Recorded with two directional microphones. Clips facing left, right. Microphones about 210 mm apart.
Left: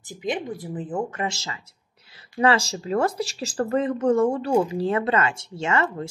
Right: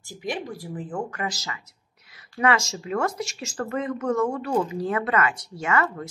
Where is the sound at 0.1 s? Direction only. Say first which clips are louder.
Left 3 dB; 20° left (ahead or behind).